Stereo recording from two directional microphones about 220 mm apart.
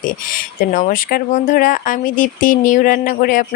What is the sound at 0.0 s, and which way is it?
Speech, 40° left (ahead or behind).